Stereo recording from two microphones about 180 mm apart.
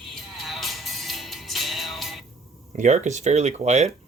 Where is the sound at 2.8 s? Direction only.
40° right (ahead or behind).